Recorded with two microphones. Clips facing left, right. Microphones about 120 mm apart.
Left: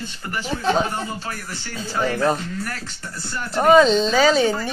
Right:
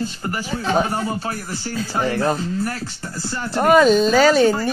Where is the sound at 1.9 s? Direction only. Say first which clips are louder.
Even; 35° right (ahead or behind).